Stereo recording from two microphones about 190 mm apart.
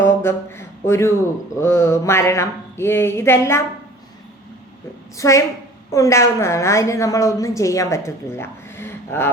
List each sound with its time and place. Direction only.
0.0 s a sound: 15° left (ahead or behind)
1.6 s a woman's voice: 15° left (ahead or behind)
5.1 s a woman's voice: 15° left (ahead or behind)